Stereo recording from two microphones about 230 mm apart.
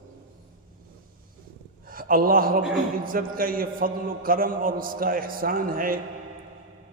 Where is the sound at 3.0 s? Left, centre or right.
Right.